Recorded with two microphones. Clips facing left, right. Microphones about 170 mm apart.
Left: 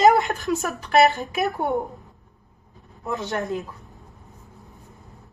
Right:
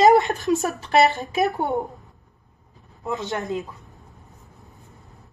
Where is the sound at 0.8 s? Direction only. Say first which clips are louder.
Left 4 dB; 25° right (ahead or behind).